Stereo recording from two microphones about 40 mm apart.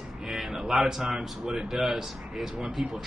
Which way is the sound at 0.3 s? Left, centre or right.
Centre.